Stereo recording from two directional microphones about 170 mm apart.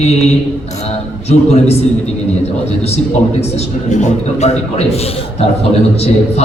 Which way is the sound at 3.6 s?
45° left (ahead or behind).